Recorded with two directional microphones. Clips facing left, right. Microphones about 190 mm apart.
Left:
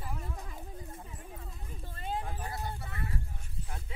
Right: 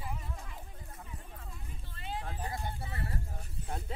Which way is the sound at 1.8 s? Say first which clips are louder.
Left 4 dB; 45° left (ahead or behind).